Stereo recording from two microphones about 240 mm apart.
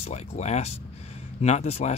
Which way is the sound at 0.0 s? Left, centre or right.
Left.